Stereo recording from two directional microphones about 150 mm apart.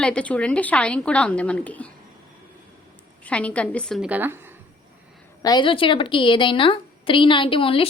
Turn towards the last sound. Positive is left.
turn(degrees=35)  # may be behind; listen again after turning